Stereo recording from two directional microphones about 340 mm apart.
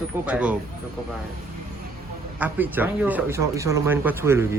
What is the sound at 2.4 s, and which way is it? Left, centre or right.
A man's voice, centre.